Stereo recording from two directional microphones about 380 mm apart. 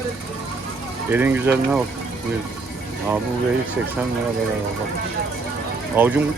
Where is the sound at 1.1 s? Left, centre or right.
Centre.